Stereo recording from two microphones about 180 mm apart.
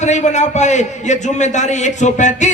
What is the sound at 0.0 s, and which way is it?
A man's voice, 40° left (ahead or behind).